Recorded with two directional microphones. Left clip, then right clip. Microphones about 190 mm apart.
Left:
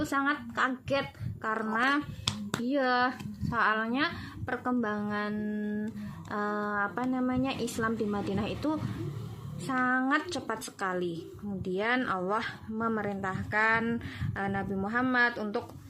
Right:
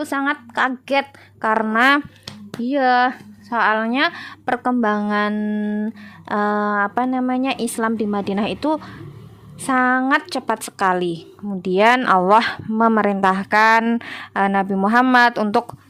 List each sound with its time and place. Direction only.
0.0 s speech: 55° right (ahead or behind)